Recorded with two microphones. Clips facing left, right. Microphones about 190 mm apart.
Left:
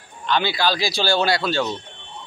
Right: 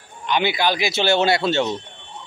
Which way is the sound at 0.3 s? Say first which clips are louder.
Right 1 dB; 20° right (ahead or behind).